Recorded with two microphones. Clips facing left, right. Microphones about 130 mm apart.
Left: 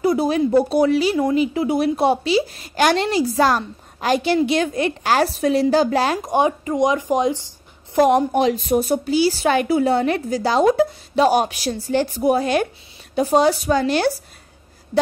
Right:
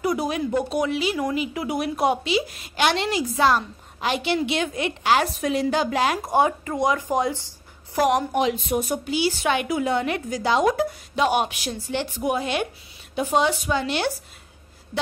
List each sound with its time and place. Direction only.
0.0 s speech: 30° left (ahead or behind)
6.2 s speech: 20° left (ahead or behind)
8.4 s speech: 40° left (ahead or behind)